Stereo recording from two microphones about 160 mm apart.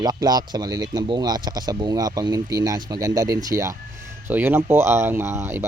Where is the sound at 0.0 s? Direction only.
25° right (ahead or behind).